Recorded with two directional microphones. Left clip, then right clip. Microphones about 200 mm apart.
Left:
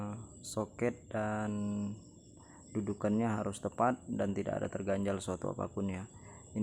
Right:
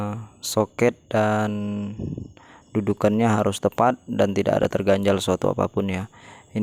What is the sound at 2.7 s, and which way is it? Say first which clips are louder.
Speech: right 14 dB; 45° right (ahead or behind).